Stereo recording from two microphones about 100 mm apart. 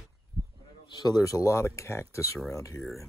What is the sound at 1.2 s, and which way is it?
Speech, 35° left (ahead or behind).